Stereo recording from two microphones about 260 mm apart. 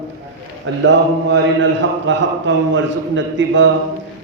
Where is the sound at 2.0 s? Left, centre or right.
Right.